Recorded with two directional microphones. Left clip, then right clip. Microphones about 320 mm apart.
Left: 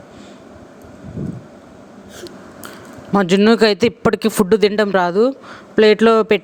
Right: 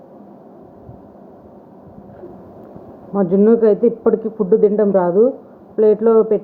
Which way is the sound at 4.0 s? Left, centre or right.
Left.